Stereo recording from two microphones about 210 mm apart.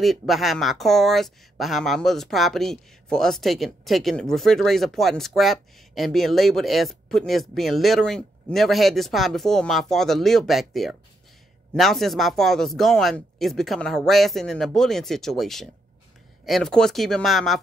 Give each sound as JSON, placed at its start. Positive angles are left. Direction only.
{"t": 0.0, "sound": "speech", "side_deg": 0}